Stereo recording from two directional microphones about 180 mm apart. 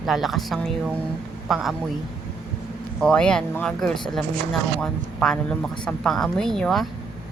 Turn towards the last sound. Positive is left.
turn(degrees=0)  # may be behind; listen again after turning